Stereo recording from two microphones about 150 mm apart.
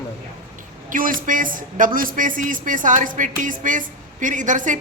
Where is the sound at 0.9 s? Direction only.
65° right (ahead or behind).